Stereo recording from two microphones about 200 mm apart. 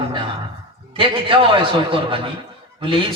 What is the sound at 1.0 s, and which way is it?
A man's voice, 25° right (ahead or behind).